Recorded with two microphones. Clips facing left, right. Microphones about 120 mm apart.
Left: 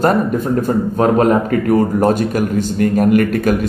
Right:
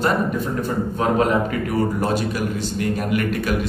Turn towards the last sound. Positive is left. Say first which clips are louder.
# left 8 dB
turn(degrees=45)  # may be behind; listen again after turning